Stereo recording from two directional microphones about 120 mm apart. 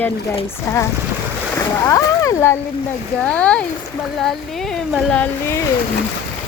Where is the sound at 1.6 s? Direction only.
25° left (ahead or behind).